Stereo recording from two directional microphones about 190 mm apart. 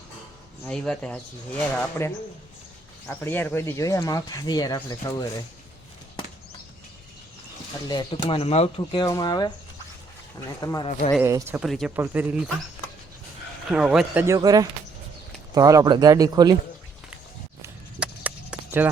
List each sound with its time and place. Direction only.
0.6 s speech: 5° left (ahead or behind); by 5.1 s 20° left (ahead or behind)
7.9 s speech: 25° left (ahead or behind)
10.6 s speech: 20° left (ahead or behind)
11.2 s speech: 15° right (ahead or behind)
11.6 s speech: centre (ahead or behind)
13.7 s speech: 5° right (ahead or behind)
14.3 s speech: 20° right (ahead or behind)
17.6 s a sound: 10° right (ahead or behind)